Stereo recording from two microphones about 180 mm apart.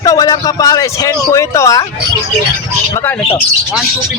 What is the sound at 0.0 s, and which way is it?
Speech, 20° left (ahead or behind).